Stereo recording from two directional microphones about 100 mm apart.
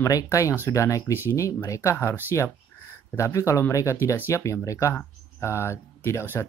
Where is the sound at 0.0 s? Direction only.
35° left (ahead or behind).